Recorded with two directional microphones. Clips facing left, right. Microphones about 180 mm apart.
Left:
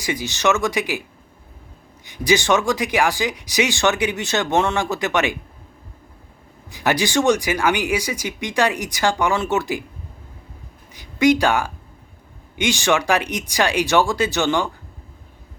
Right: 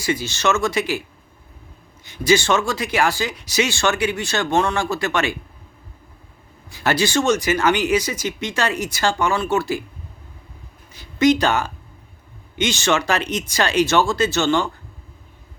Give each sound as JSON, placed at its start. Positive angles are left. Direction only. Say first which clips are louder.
{"t": 0.0, "sound": "speech", "louder": "even", "side_deg": 15}
{"t": 2.0, "sound": "speech", "louder": "even", "side_deg": 15}
{"t": 6.7, "sound": "speech", "louder": "even", "side_deg": 15}
{"t": 10.9, "sound": "speech", "louder": "even", "side_deg": 15}